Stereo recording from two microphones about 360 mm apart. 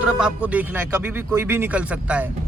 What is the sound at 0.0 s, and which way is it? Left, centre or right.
Speech, centre.